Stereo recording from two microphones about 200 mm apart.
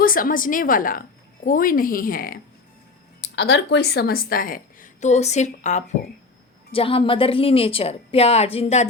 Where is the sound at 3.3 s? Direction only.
60° left (ahead or behind); by 8.9 s 30° left (ahead or behind).